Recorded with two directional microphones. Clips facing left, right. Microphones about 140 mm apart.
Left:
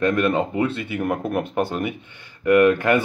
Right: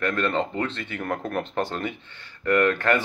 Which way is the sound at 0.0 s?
15° left (ahead or behind).